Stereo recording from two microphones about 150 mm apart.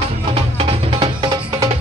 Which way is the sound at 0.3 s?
35° right (ahead or behind).